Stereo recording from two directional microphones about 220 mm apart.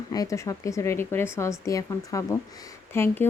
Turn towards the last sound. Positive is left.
turn(degrees=10)  # may be behind; listen again after turning